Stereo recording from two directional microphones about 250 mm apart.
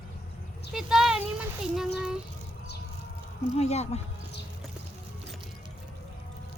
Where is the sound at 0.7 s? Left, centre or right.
Centre.